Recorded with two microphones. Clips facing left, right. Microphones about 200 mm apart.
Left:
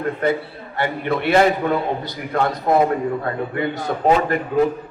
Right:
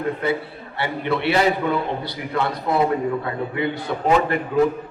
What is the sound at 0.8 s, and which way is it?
A man's voice, 50° left (ahead or behind).